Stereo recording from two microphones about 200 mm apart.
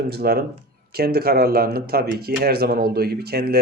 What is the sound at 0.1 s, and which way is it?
Speech, 50° right (ahead or behind).